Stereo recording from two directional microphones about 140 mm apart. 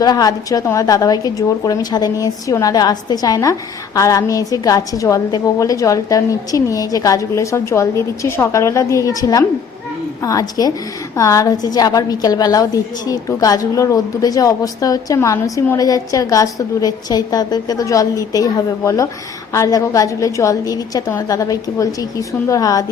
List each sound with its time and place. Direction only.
0.0 s a woman's voice: 25° left (ahead or behind)